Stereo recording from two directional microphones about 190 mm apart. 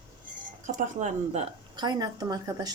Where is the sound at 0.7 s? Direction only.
40° right (ahead or behind).